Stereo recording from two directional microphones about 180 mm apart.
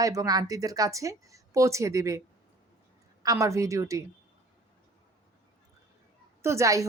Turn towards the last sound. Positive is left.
turn(degrees=-15)  # may be behind; listen again after turning